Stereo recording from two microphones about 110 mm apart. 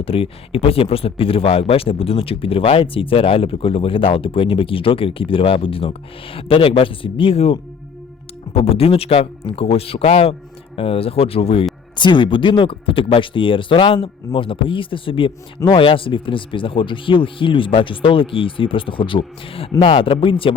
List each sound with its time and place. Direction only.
0.0 s speech: 60° left (ahead or behind)
11.9 s speech: 45° left (ahead or behind)